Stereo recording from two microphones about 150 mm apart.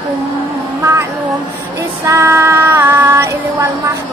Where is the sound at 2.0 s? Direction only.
15° right (ahead or behind).